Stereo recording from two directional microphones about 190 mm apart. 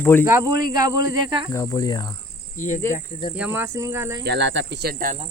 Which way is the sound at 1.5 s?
15° left (ahead or behind).